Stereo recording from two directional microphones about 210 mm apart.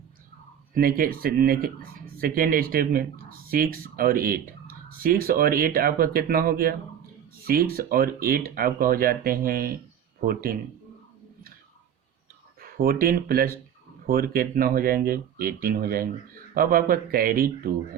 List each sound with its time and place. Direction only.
0.7 s speech: 45° right (ahead or behind)
12.7 s speech: 45° right (ahead or behind)